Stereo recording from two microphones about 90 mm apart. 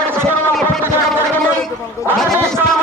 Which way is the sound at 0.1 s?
25° right (ahead or behind).